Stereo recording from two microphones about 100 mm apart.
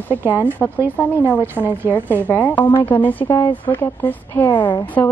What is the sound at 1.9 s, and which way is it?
Speech, 20° left (ahead or behind).